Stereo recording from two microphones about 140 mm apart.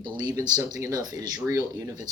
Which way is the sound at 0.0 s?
25° right (ahead or behind).